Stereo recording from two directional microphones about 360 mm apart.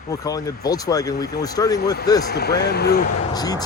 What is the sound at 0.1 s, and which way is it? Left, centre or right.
Speech, centre.